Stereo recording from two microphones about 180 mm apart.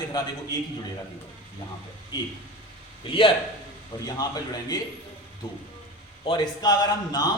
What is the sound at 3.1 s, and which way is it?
A man's voice, 30° left (ahead or behind).